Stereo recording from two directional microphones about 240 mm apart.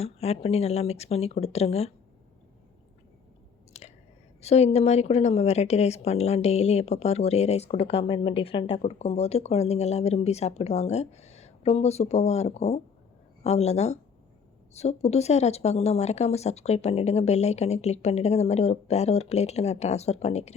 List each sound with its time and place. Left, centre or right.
0.0 s a woman's voice: left
3.7 s a sound: left
4.4 s a woman's voice: left